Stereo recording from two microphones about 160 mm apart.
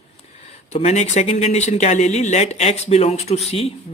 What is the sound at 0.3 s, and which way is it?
A man's voice, 40° left (ahead or behind).